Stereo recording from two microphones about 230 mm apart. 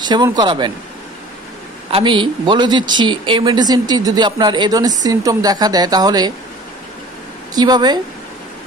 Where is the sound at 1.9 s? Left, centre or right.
Right.